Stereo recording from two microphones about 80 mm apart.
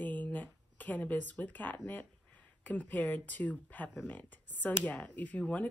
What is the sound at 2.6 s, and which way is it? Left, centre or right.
Speech, left.